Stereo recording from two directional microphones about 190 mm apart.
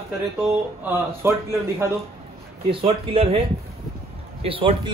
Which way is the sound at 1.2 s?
15° right (ahead or behind).